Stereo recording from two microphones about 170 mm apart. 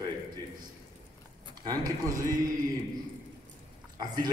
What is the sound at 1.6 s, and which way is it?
Speech, 20° right (ahead or behind).